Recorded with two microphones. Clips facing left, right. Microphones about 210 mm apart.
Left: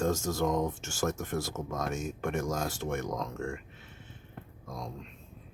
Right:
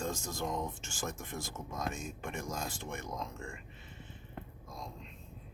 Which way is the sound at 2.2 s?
80° left.